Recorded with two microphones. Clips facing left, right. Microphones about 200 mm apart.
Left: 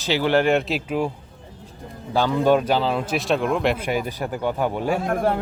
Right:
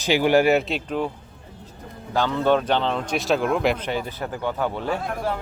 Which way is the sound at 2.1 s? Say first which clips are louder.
Left 2 dB; 10° left (ahead or behind).